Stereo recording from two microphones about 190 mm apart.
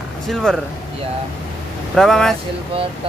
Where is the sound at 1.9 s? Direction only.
Centre (ahead or behind).